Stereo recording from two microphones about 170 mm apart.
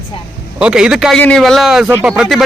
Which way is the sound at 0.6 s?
5° right (ahead or behind).